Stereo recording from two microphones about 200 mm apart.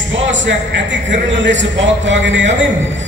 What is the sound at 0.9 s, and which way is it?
A man's voice, 60° right (ahead or behind).